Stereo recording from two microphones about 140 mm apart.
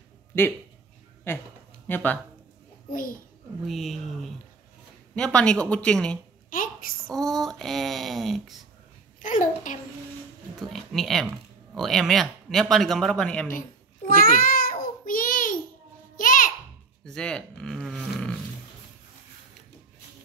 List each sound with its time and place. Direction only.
0.3 s speech: 15° left (ahead or behind)
2.9 s a child's voice: 80° left
3.6 s speech: centre (ahead or behind)
9.2 s a child's voice: 65° left (ahead or behind)
10.6 s speech: centre (ahead or behind)
13.5 s babbling: 80° left
17.0 s a sound: 5° left (ahead or behind)